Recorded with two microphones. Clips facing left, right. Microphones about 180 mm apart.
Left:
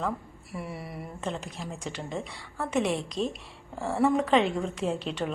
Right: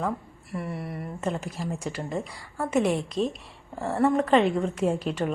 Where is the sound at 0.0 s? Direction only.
Centre (ahead or behind).